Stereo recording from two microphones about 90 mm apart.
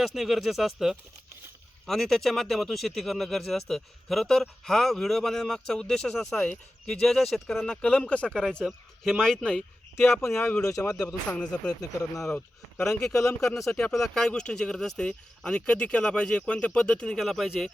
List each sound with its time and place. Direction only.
0.0 s speech: centre (ahead or behind)
7.8 s speech: 15° left (ahead or behind)
10.0 s speech: 30° left (ahead or behind)
11.0 s speech: 10° left (ahead or behind)
11.8 s speech: 40° left (ahead or behind)
13.0 s speech: 5° left (ahead or behind)